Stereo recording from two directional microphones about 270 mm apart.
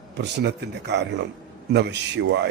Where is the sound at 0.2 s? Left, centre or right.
Right.